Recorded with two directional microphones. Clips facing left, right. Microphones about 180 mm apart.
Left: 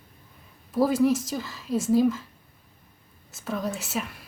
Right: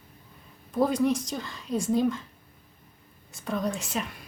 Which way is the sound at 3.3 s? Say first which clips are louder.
Right 1 dB; centre (ahead or behind).